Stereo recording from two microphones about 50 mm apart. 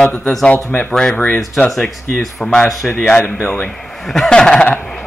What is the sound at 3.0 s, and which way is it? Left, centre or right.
Speech, centre.